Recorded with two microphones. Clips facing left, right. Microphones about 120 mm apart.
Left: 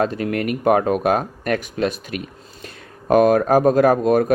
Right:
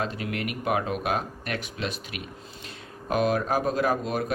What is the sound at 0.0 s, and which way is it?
Speech, 50° left (ahead or behind).